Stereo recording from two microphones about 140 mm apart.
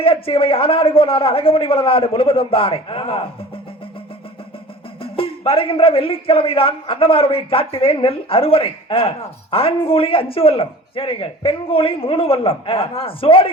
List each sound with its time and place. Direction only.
0.0 s a man's voice: 40° left (ahead or behind)
5.0 s a man's voice: 40° left (ahead or behind)